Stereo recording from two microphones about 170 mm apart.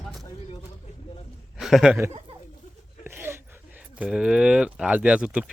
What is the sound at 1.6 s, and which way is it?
Speech, centre (ahead or behind).